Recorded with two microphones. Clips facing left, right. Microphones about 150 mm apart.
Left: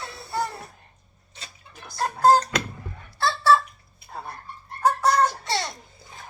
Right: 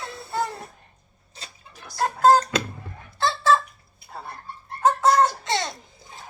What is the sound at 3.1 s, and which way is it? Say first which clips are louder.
Chicken: right 1 dB; 20° right (ahead or behind).